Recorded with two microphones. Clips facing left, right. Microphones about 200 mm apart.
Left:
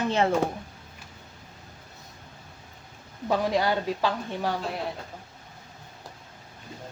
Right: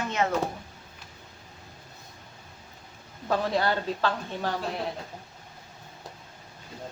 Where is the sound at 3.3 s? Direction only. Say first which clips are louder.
Left 1 dB; 15° left (ahead or behind).